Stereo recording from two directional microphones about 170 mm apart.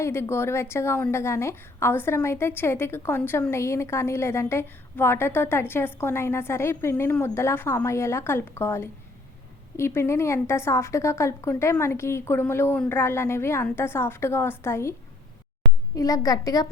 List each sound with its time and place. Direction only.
0.0 s a woman's voice: 15° left (ahead or behind)
16.0 s a woman's voice: 20° left (ahead or behind)